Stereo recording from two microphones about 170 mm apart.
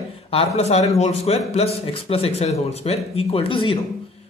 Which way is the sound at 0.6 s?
40° left (ahead or behind).